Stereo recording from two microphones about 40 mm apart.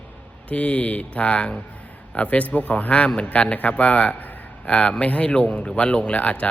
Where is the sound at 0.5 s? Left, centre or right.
Left.